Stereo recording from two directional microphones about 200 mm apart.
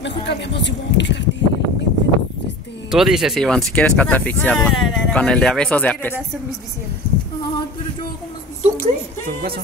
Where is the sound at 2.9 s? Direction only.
Centre (ahead or behind).